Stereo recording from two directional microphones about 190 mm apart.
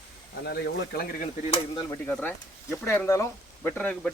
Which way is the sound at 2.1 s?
10° left (ahead or behind).